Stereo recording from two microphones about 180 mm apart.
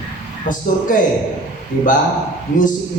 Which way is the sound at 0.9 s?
45° left (ahead or behind).